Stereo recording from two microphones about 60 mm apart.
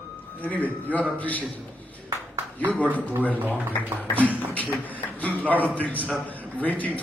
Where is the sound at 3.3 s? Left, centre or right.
Right.